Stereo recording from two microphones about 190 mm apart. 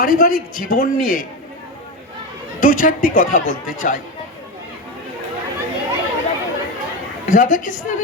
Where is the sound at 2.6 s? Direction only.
45° left (ahead or behind).